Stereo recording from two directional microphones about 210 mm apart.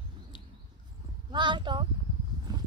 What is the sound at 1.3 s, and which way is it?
Speech, 20° right (ahead or behind).